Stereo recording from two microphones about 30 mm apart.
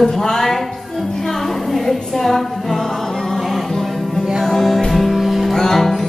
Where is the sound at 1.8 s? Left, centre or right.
Centre.